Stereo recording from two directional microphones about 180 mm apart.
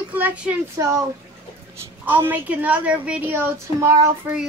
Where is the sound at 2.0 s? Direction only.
10° right (ahead or behind).